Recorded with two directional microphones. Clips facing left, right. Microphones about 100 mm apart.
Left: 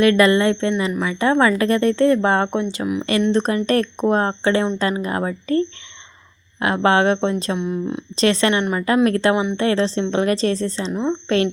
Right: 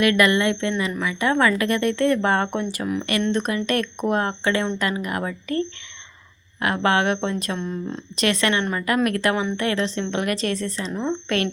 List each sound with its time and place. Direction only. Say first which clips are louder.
0.0 s speech: left 4 dB; 30° left (ahead or behind)
2.8 s speech: left 3 dB; 10° left (ahead or behind)
3.3 s speech: left 5 dB; 35° left (ahead or behind)
7.6 s speech: left 5 dB; 10° left (ahead or behind)
8.1 s speech: left 4 dB; 30° left (ahead or behind)
9.3 s speech: left 4 dB; 15° left (ahead or behind)
9.6 s speech: left 5 dB; 30° left (ahead or behind)